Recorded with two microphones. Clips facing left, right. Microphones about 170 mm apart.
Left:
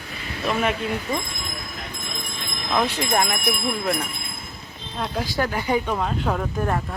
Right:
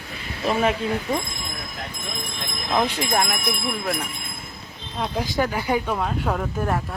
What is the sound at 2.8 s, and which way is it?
Speech, 10° right (ahead or behind).